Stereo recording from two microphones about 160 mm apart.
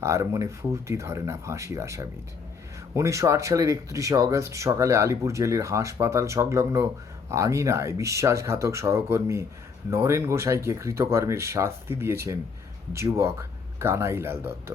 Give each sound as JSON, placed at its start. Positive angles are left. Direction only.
{"t": 0.0, "sound": "speech", "side_deg": -15}